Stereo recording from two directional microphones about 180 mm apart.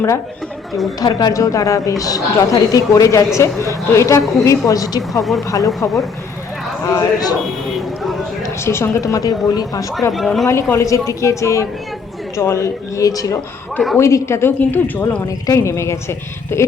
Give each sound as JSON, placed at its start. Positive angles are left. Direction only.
{"t": 0.9, "sound": "a woman's voice", "side_deg": 20}
{"t": 8.4, "sound": "speech", "side_deg": 15}
{"t": 10.1, "sound": "speech", "side_deg": 0}
{"t": 10.4, "sound": "a woman's voice", "side_deg": 15}